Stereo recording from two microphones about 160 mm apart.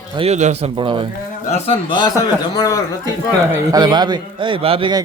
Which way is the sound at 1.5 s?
40° left (ahead or behind).